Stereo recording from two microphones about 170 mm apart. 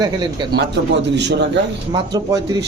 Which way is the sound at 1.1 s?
90° right.